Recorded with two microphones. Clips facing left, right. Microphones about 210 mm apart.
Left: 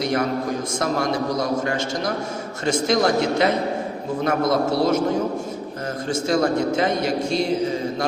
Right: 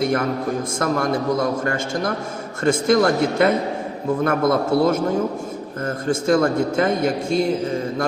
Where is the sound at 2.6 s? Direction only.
55° right (ahead or behind).